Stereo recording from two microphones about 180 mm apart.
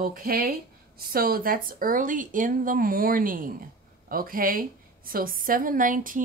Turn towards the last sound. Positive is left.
turn(degrees=-50)  # may be behind; listen again after turning